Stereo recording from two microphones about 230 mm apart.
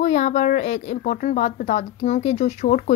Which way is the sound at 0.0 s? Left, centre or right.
Left.